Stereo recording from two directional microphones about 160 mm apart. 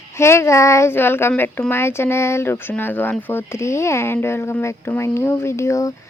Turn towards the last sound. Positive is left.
turn(degrees=20)  # may be behind; listen again after turning